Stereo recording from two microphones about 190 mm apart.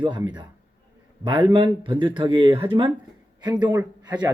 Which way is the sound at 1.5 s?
25° right (ahead or behind).